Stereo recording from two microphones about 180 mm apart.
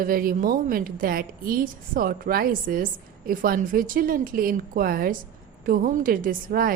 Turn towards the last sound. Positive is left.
turn(degrees=-55)  # may be behind; listen again after turning